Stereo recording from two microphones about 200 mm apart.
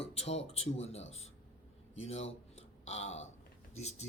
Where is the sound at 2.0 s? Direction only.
30° left (ahead or behind).